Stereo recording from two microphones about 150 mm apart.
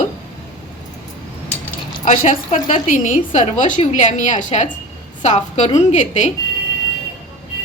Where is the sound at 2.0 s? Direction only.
55° left (ahead or behind).